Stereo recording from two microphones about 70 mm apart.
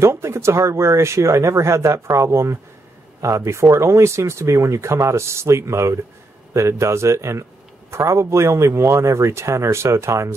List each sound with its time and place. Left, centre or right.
0.0 s a man's voice: right